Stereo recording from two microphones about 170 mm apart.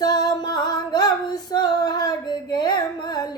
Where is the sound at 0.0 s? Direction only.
20° left (ahead or behind).